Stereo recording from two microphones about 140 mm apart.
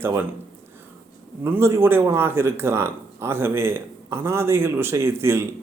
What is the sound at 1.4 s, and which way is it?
Speech, 15° right (ahead or behind).